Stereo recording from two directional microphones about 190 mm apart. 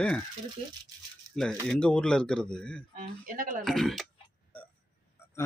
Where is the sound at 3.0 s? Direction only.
45° right (ahead or behind).